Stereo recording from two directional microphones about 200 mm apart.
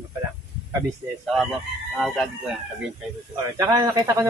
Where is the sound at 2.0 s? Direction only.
Centre (ahead or behind).